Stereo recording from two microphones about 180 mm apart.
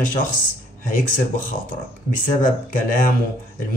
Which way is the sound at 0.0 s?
50° left (ahead or behind).